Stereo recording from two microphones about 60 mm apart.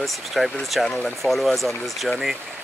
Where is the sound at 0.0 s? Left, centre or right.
Centre.